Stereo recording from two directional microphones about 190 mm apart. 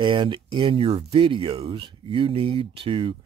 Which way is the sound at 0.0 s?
25° right (ahead or behind).